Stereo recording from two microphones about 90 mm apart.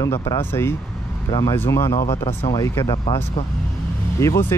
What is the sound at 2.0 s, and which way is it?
Speech, 90° left.